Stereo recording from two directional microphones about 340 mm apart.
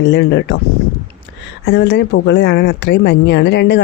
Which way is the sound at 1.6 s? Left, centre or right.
Left.